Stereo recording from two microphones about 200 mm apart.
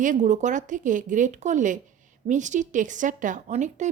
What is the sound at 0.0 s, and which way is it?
A woman's voice, 40° right (ahead or behind).